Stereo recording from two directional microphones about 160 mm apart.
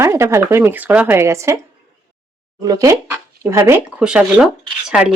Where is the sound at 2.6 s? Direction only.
20° right (ahead or behind).